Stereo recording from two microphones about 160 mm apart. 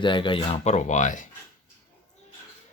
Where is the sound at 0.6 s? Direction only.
45° left (ahead or behind).